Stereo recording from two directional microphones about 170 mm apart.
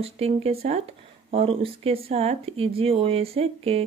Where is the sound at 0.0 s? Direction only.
35° right (ahead or behind).